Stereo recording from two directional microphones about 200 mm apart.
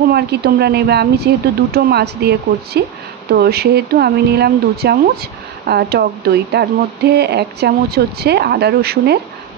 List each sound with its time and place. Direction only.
0.1 s speech: 55° right (ahead or behind)